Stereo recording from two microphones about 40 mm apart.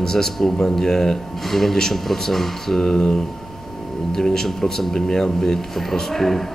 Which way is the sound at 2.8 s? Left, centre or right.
Centre.